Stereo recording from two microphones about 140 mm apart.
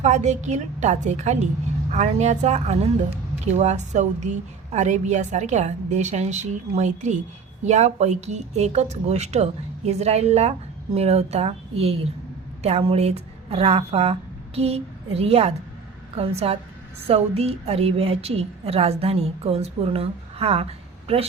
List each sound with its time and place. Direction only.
0.0 s a woman's voice: 55° right (ahead or behind)